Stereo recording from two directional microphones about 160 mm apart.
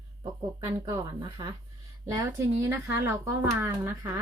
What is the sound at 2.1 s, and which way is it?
Speech, 20° right (ahead or behind).